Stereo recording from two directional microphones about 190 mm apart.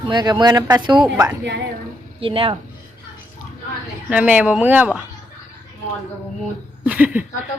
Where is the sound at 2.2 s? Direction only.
30° right (ahead or behind).